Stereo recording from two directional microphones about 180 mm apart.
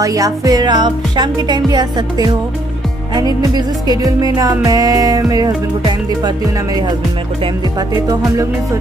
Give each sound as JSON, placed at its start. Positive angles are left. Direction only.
{"t": 0.0, "sound": "music", "side_deg": -20}
{"t": 3.5, "sound": "music", "side_deg": -20}
{"t": 7.9, "sound": "music", "side_deg": -20}